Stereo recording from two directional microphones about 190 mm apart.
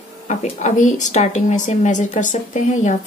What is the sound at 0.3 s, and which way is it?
A woman's voice, 40° left (ahead or behind).